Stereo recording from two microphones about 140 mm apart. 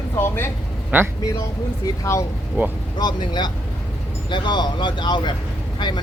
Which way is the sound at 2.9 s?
30° left (ahead or behind).